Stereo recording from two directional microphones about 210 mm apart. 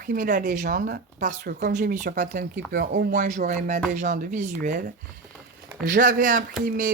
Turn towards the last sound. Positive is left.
turn(degrees=-40)  # may be behind; listen again after turning